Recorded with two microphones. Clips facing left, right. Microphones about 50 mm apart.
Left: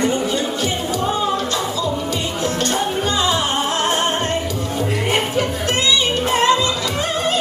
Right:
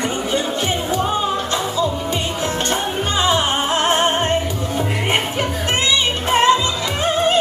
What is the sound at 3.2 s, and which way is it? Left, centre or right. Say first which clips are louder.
Music: right 1 dB; right.